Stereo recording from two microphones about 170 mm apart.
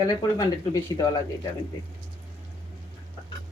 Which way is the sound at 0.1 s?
25° left (ahead or behind).